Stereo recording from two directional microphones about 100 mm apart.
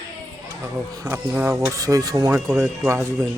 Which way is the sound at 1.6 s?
35° right (ahead or behind).